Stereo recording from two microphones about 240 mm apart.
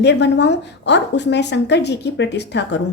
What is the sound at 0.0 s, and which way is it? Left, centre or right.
A woman's voice, left.